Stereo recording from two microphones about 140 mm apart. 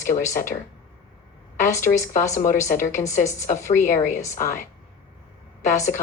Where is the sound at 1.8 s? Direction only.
20° left (ahead or behind).